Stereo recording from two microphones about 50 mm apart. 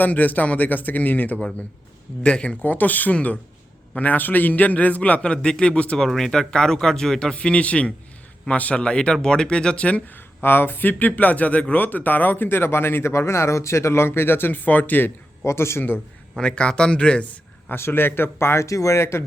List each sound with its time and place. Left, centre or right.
0.0 s speech: left
2.2 s speech: left
2.6 s speech: left
5.3 s speech: centre
6.0 s speech: centre; by 10.2 s left
10.2 s speech: left
15.4 s a man's voice: left
16.4 s speech: centre
17.7 s a man's voice: left